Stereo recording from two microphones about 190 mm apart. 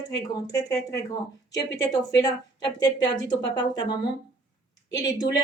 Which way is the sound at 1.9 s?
20° left (ahead or behind).